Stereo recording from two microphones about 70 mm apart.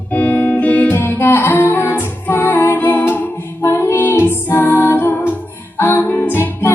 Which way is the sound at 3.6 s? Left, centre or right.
Left.